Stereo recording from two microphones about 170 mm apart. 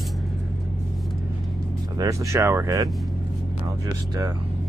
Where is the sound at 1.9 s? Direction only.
20° right (ahead or behind).